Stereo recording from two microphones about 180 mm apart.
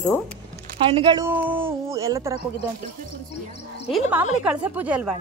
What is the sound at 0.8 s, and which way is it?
Speech, 25° right (ahead or behind).